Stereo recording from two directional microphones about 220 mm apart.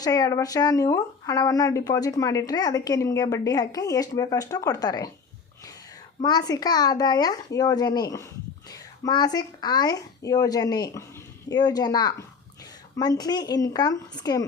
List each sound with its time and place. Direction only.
0.0 s speech: 15° left (ahead or behind)
6.2 s speech: 20° left (ahead or behind)